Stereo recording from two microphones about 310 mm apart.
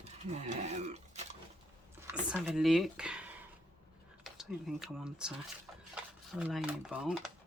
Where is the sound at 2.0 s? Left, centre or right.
Centre.